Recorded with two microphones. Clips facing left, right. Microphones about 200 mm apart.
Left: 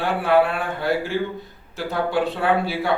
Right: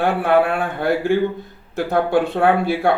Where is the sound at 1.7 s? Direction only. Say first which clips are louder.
Right 5 dB; 50° right (ahead or behind).